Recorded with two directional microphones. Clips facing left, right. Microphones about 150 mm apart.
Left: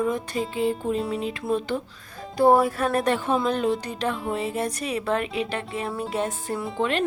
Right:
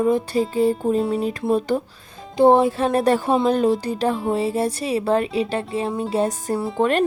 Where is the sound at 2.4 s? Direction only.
25° right (ahead or behind).